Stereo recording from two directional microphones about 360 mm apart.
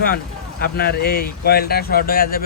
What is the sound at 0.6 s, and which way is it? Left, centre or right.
Speech, left.